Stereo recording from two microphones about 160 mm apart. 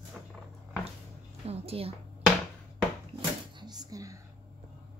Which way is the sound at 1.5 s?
40° right (ahead or behind).